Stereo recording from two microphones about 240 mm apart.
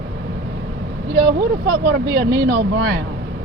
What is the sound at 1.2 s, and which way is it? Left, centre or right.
Speech, right.